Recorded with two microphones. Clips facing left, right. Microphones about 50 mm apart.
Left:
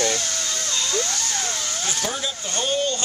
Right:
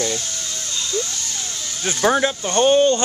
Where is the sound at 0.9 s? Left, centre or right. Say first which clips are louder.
Even; left.